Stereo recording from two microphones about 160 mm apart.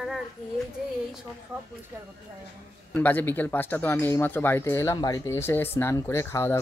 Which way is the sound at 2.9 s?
10° left (ahead or behind).